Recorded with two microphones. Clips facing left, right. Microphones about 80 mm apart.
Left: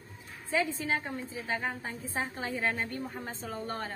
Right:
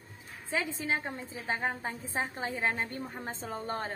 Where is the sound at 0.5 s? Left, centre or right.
Right.